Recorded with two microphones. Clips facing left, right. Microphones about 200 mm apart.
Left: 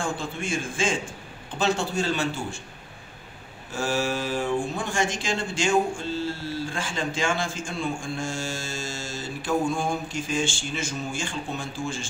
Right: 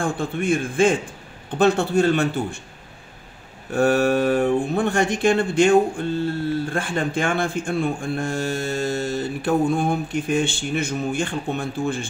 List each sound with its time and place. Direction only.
0.0 s speech: 60° right (ahead or behind)
3.7 s speech: 60° right (ahead or behind)